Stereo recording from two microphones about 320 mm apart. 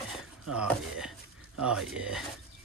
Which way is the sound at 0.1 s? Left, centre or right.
Centre.